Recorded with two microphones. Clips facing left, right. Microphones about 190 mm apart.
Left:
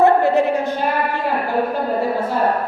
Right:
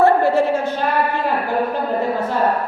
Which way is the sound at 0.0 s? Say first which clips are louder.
Even; 20° left (ahead or behind).